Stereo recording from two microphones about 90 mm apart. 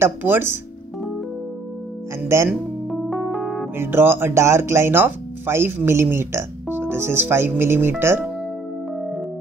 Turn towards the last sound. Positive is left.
turn(degrees=-25)  # may be behind; listen again after turning